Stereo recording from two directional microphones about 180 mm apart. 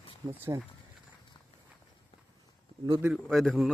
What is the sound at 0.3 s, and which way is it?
Speech, 15° right (ahead or behind).